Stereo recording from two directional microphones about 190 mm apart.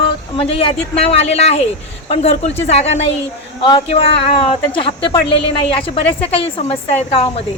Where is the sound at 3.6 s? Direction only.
25° left (ahead or behind).